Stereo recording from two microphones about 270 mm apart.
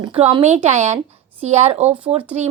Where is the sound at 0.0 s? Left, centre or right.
Centre.